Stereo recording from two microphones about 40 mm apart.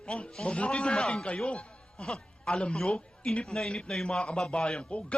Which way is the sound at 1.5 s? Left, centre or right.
Left.